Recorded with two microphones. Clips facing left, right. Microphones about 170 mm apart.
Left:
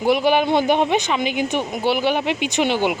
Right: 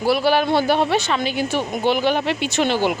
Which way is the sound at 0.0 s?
20° left (ahead or behind).